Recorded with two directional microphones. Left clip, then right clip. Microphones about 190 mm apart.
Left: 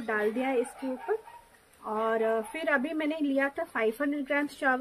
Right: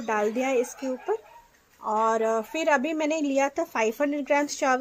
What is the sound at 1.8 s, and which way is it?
Speech, 15° right (ahead or behind).